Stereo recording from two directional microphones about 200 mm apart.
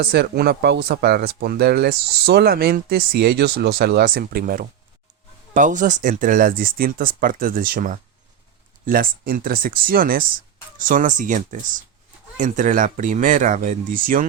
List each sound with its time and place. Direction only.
0.0 s speech: 55° right (ahead or behind)